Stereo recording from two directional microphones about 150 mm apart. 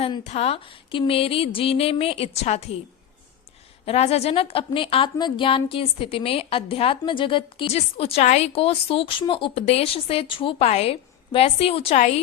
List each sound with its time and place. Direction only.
0.3 s a woman's voice: 45° left (ahead or behind)
3.8 s a woman's voice: 45° left (ahead or behind)